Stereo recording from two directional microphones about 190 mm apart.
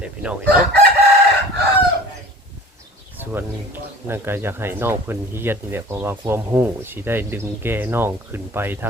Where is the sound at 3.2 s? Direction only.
10° right (ahead or behind).